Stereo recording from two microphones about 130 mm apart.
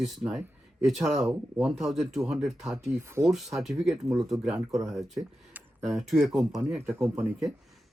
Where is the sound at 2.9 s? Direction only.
20° right (ahead or behind).